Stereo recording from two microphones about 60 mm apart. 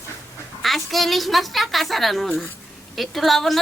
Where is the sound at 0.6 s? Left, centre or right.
Centre.